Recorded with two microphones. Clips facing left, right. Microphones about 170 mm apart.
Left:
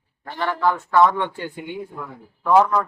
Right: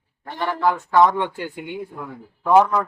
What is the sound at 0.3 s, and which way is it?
Speech, 10° right (ahead or behind).